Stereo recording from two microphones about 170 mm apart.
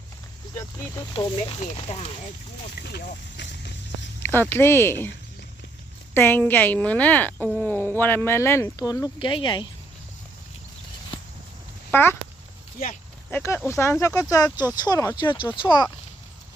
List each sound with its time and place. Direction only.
0.5 s speech: 20° left (ahead or behind)
1.4 s speech: 40° left (ahead or behind)
2.8 s speech: 75° left (ahead or behind)
4.2 s a woman's voice: 15° left (ahead or behind)
6.1 s a woman's voice: 10° left (ahead or behind); by 9.6 s 25° left (ahead or behind)
11.9 s speech: 10° left (ahead or behind)
13.3 s a woman's voice: 15° left (ahead or behind)